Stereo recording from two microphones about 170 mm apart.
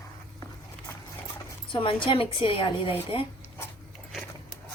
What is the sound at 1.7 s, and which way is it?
A woman's voice, 30° left (ahead or behind).